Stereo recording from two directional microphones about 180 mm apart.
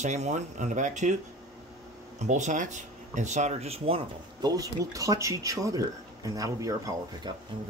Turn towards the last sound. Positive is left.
turn(degrees=-20)  # may be behind; listen again after turning